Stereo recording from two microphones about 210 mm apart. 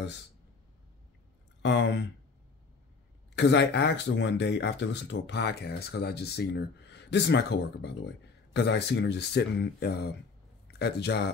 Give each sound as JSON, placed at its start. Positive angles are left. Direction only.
{"t": 1.6, "sound": "speech", "side_deg": 55}
{"t": 3.3, "sound": "speech", "side_deg": 55}